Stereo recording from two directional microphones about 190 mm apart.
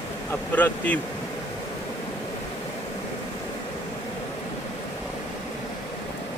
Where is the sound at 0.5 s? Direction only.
10° left (ahead or behind).